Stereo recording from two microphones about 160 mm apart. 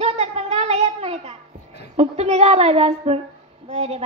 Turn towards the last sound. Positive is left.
turn(degrees=-40)  # may be behind; listen again after turning